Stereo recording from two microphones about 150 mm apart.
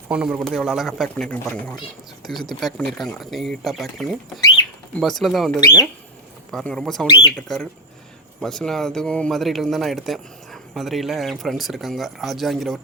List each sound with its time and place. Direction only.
0.1 s speech: 5° right (ahead or behind)
5.5 s speech: 25° left (ahead or behind)
6.5 s speech: 5° left (ahead or behind)